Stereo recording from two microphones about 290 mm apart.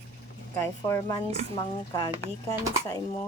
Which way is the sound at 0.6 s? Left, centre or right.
Centre.